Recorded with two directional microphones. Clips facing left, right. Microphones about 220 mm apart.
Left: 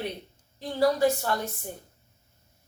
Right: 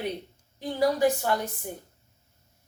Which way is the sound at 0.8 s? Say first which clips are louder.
Even; 15° right (ahead or behind).